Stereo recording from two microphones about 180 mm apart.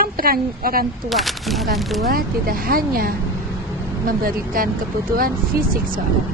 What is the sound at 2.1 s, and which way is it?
Speech, 55° right (ahead or behind).